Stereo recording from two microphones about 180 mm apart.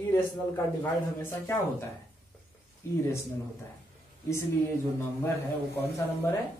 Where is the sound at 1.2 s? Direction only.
15° left (ahead or behind).